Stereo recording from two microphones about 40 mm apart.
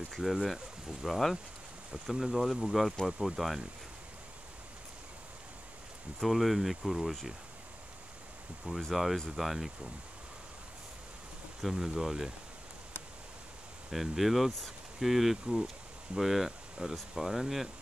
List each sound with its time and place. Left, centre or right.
0.2 s speech: centre
6.2 s speech: centre
8.9 s speech: centre
11.6 s speech: centre
13.8 s speech: centre
16.8 s speech: right
17.1 s speech: centre